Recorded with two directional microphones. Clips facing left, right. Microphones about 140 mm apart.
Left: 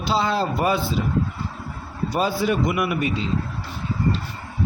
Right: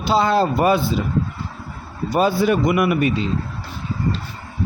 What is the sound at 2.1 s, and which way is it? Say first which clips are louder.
Speech: right 5 dB; 55° right (ahead or behind).